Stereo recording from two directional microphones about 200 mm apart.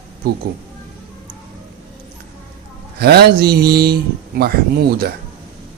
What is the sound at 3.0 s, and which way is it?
Speech, 50° right (ahead or behind).